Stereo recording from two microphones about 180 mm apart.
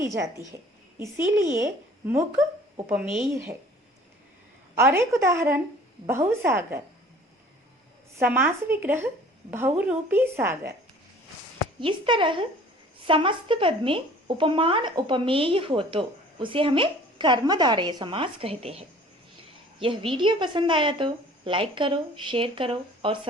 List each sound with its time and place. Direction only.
0.0 s a woman's voice: 15° right (ahead or behind)
2.9 s speech: 5° right (ahead or behind)
4.8 s a woman's voice: 15° right (ahead or behind)
8.2 s a woman's voice: 10° right (ahead or behind)
11.8 s speech: 30° right (ahead or behind)